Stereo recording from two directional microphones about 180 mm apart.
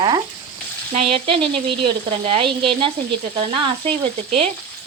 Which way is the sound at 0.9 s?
35° right (ahead or behind).